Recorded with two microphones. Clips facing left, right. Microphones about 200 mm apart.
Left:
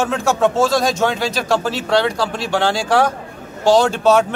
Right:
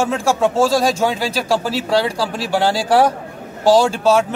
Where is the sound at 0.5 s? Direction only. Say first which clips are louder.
Right 1 dB; 35° right (ahead or behind).